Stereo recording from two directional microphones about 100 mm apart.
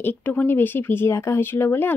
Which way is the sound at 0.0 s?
20° left (ahead or behind).